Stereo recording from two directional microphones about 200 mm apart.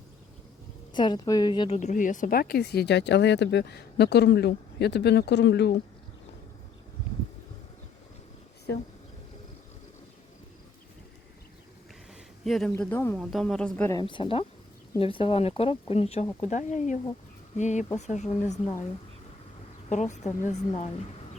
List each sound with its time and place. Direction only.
0.9 s a woman's voice: 20° left (ahead or behind); by 5.7 s 60° left (ahead or behind)
12.5 s speech: centre (ahead or behind)
13.9 s speech: 25° left (ahead or behind)
19.9 s speech: 35° left (ahead or behind)